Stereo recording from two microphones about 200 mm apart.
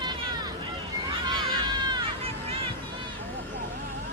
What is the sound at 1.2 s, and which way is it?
Run, 20° right (ahead or behind).